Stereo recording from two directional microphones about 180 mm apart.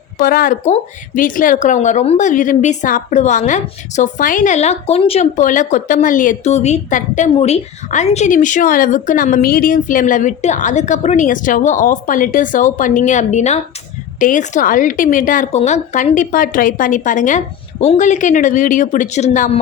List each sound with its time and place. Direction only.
0.2 s a woman's voice: 55° left (ahead or behind); by 5.3 s 35° left (ahead or behind)
5.4 s a woman's voice: 45° left (ahead or behind)